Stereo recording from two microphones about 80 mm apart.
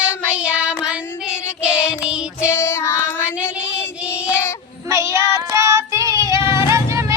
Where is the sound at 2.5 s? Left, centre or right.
Left.